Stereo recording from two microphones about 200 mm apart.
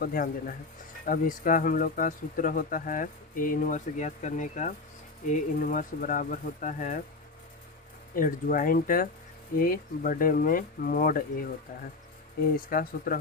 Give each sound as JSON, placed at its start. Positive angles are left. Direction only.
{"t": 0.0, "sound": "speech", "side_deg": 45}
{"t": 8.1, "sound": "speech", "side_deg": 45}
{"t": 12.5, "sound": "speech", "side_deg": 45}